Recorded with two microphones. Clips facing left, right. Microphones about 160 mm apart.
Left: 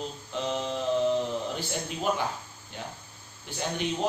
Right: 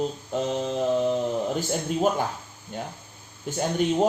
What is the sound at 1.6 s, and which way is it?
Speech, 45° right (ahead or behind).